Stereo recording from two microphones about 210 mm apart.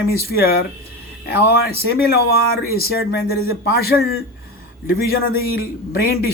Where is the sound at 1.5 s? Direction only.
50° left (ahead or behind).